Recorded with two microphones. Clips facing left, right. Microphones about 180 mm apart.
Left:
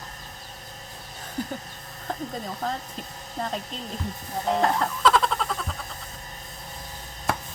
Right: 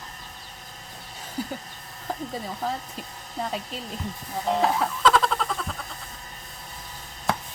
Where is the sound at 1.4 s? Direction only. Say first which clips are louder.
Even; 5° right (ahead or behind).